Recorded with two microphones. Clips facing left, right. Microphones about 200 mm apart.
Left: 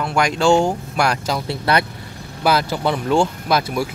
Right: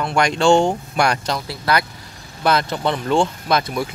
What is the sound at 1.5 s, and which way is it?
Speech, 25° left (ahead or behind).